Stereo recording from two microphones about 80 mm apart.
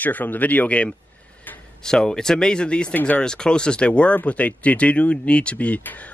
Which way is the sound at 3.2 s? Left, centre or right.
Centre.